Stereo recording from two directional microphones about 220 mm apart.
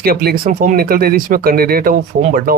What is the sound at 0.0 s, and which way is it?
Speech, 45° right (ahead or behind).